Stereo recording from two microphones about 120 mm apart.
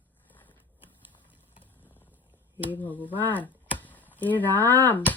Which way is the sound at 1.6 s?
15° left (ahead or behind).